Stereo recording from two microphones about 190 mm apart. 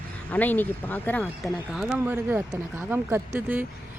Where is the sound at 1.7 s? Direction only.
5° right (ahead or behind).